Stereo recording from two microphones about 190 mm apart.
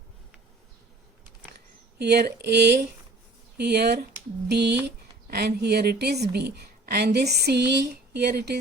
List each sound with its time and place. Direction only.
2.0 s speech: 60° right (ahead or behind)